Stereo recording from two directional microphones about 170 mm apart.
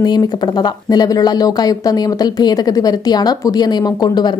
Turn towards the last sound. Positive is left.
turn(degrees=25)  # may be behind; listen again after turning